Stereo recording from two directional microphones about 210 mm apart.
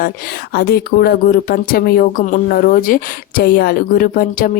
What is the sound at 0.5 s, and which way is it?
Speech, 45° left (ahead or behind).